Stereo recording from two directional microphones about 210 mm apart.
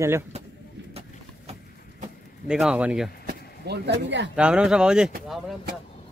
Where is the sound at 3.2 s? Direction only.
55° right (ahead or behind).